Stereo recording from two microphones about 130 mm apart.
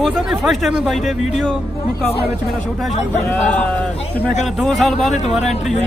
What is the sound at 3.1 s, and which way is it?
Speech, 15° left (ahead or behind).